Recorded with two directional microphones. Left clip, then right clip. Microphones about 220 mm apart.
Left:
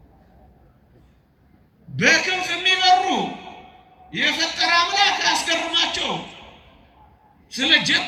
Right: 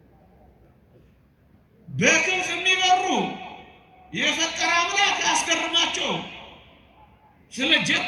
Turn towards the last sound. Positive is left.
turn(degrees=15)  # may be behind; listen again after turning